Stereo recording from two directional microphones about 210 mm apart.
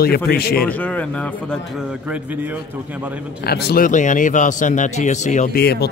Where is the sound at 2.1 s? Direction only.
10° right (ahead or behind).